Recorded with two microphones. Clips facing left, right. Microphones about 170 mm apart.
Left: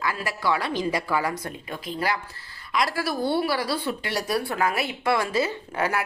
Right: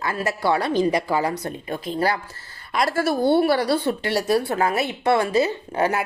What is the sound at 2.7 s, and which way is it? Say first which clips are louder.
Speech: right 3 dB; 50° right (ahead or behind).